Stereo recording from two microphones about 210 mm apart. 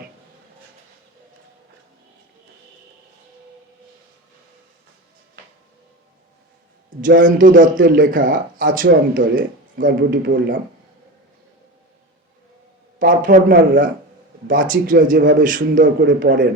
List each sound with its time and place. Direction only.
7.0 s a man's voice: 40° right (ahead or behind)
13.0 s a man's voice: 40° right (ahead or behind)